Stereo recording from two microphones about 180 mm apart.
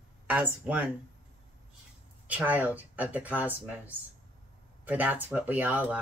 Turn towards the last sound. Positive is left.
turn(degrees=-10)  # may be behind; listen again after turning